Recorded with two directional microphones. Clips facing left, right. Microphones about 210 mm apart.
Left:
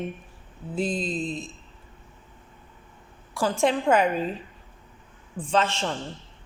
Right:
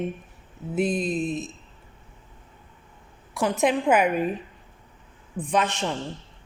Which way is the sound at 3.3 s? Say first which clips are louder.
Right 1 dB; 20° right (ahead or behind).